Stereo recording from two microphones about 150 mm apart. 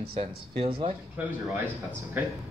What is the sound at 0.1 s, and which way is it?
Speech, 35° right (ahead or behind).